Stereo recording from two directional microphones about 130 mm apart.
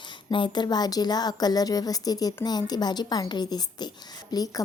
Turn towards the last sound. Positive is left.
turn(degrees=30)  # may be behind; listen again after turning